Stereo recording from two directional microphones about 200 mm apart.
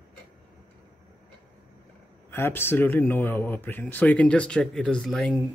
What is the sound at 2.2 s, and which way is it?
Speech, 10° left (ahead or behind).